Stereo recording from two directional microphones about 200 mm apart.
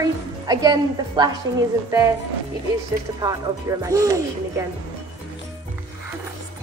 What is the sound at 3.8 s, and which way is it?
Speech, 15° right (ahead or behind).